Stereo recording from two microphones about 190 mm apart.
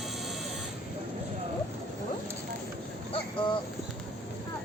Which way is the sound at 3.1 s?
25° left (ahead or behind).